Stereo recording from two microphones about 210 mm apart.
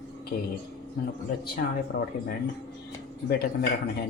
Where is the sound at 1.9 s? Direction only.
45° left (ahead or behind).